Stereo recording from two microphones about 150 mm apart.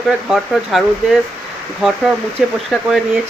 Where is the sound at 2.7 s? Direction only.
Centre (ahead or behind).